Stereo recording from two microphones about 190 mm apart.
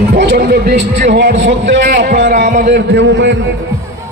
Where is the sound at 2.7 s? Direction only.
65° right (ahead or behind).